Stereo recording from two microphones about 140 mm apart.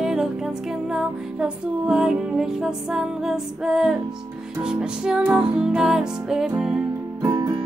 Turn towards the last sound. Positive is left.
turn(degrees=-25)  # may be behind; listen again after turning